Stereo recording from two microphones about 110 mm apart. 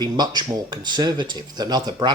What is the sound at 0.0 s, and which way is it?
Speech, 40° right (ahead or behind).